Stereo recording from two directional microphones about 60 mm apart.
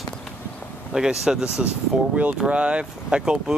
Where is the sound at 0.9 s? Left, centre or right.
Centre.